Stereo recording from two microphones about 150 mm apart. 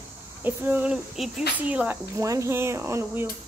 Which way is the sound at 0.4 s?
15° right (ahead or behind).